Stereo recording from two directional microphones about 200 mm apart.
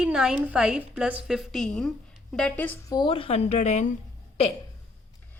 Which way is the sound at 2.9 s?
25° left (ahead or behind).